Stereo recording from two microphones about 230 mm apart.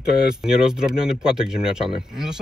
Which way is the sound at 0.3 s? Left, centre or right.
Centre.